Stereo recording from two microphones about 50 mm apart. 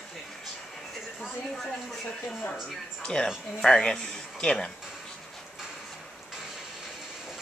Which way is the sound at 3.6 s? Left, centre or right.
Centre.